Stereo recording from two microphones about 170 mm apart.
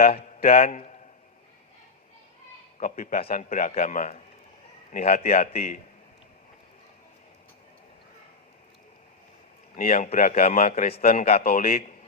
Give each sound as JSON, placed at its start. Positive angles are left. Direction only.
{"t": 0.2, "sound": "speech", "side_deg": 60}
{"t": 0.6, "sound": "a man's voice", "side_deg": 40}
{"t": 2.7, "sound": "a man's voice", "side_deg": 50}
{"t": 9.7, "sound": "a man's voice", "side_deg": 55}